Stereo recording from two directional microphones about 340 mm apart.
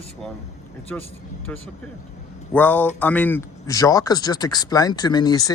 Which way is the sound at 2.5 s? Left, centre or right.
Centre.